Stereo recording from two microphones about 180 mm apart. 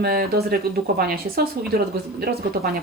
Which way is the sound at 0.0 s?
60° right (ahead or behind).